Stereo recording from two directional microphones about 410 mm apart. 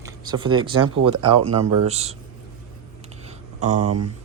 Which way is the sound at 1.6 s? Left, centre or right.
Right.